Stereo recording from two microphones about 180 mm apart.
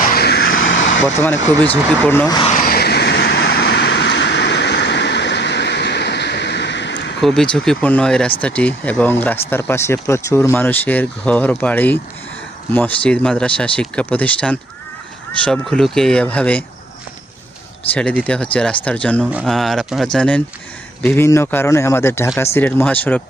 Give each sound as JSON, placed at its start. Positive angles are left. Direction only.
{"t": 0.1, "sound": "vehicle", "side_deg": 60}
{"t": 1.0, "sound": "speech", "side_deg": 10}
{"t": 2.5, "sound": "vehicle", "side_deg": 55}
{"t": 7.2, "sound": "speech", "side_deg": 0}
{"t": 17.9, "sound": "speech", "side_deg": 5}